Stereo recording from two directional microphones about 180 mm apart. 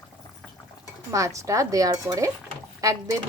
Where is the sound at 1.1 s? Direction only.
15° right (ahead or behind).